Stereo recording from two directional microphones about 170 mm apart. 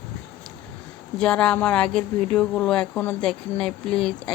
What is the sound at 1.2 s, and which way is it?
A woman's voice, 5° left (ahead or behind).